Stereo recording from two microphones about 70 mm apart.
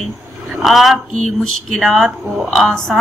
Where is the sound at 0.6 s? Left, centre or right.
Centre.